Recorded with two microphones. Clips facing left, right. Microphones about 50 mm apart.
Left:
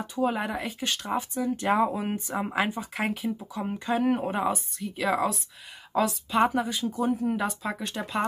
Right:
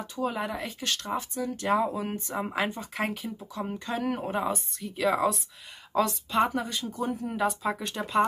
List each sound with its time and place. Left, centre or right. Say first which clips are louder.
0.0 s speech: left 3 dB; centre